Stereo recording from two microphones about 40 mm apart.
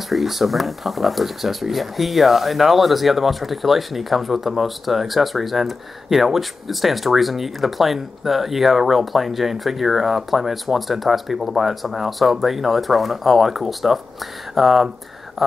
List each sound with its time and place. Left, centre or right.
0.1 s speech: centre